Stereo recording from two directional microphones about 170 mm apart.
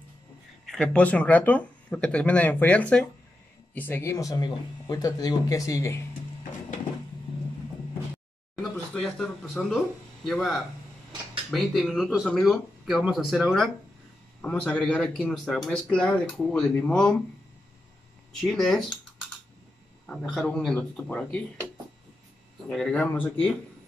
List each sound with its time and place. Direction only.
0.7 s speech: 5° left (ahead or behind)
8.9 s speech: 5° left (ahead or behind)
18.3 s speech: centre (ahead or behind)
20.1 s speech: 5° left (ahead or behind)
22.7 s speech: 5° left (ahead or behind)